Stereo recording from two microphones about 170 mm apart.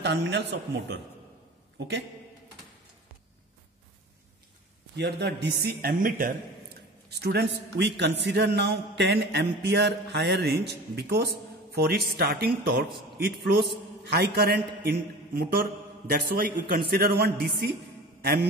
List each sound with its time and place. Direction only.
0.0 s a man's voice: 90° right
4.9 s speech: 80° right; by 6.3 s 55° right (ahead or behind)
7.1 s a man's voice: 70° right (ahead or behind)
8.0 s a man's voice: 90° right; by 17.6 s 65° right (ahead or behind)
18.2 s mantra: 65° right (ahead or behind)